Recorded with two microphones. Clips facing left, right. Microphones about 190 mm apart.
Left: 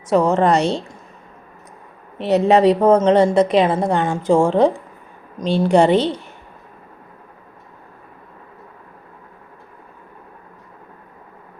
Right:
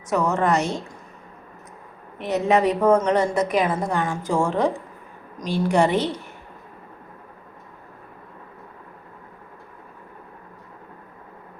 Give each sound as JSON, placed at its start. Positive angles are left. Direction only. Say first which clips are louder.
{"t": 0.1, "sound": "a woman's voice", "louder": "left 6 dB", "side_deg": 30}
{"t": 2.1, "sound": "a woman's voice", "louder": "left 6 dB", "side_deg": 30}